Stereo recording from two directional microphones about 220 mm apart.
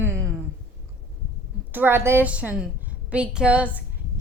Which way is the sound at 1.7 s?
10° right (ahead or behind).